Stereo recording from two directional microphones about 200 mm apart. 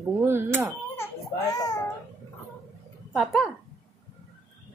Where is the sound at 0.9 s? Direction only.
15° left (ahead or behind).